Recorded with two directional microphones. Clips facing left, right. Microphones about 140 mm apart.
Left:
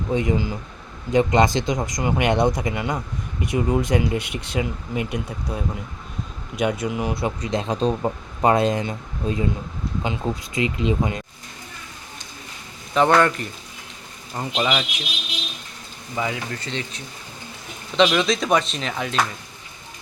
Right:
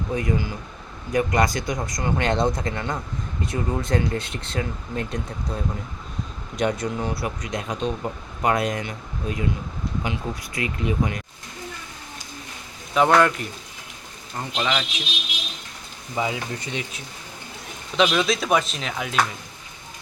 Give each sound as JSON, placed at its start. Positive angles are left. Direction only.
{"t": 0.1, "sound": "speech", "side_deg": 20}
{"t": 12.9, "sound": "speech", "side_deg": -5}
{"t": 14.3, "sound": "speech", "side_deg": 10}
{"t": 16.1, "sound": "speech", "side_deg": -20}